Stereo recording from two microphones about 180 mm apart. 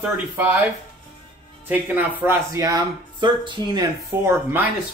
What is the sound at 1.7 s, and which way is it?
Speech, 10° right (ahead or behind).